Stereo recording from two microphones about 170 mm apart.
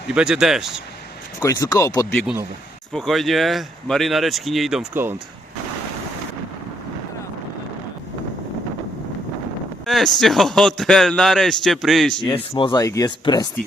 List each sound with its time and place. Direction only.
0.1 s a man's voice: 5° right (ahead or behind)
1.4 s speech: 20° left (ahead or behind)
2.9 s a man's voice: centre (ahead or behind)
9.8 s a man's voice: centre (ahead or behind)
12.2 s speech: 30° left (ahead or behind)